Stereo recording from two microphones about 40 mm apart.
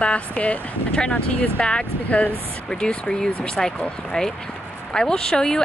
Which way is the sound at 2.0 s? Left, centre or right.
Left.